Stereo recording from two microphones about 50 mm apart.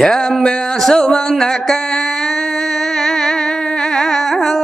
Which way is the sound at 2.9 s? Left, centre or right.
Centre.